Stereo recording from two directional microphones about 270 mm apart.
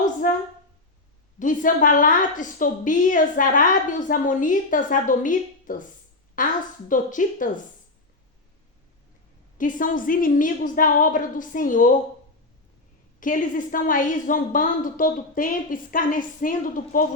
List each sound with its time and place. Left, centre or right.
0.0 s a sound: left
1.4 s a woman's voice: left
9.6 s a woman's voice: left
13.1 s a woman's voice: left